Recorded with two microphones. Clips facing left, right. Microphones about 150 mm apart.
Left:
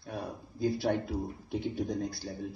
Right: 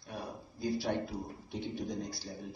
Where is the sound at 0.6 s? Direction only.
55° left (ahead or behind).